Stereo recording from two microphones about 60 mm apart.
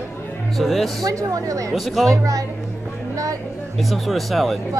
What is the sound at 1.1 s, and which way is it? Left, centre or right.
Speech, right.